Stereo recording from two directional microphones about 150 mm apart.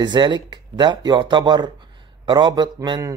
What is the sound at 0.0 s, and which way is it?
A man's voice, 30° right (ahead or behind).